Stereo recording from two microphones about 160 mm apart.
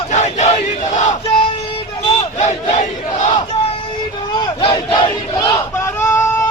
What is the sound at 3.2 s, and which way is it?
Battle cry, 30° left (ahead or behind).